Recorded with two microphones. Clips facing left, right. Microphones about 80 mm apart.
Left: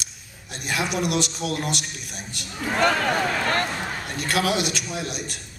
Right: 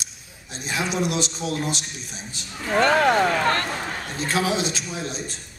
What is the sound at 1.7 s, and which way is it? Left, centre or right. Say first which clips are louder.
Speech: even; left.